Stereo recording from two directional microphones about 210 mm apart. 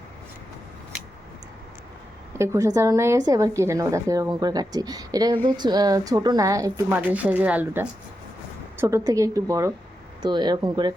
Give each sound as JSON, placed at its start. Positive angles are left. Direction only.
{"t": 2.3, "sound": "a woman's voice", "side_deg": -15}